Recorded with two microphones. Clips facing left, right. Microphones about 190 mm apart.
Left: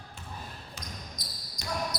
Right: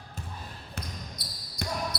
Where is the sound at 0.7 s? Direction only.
60° right (ahead or behind).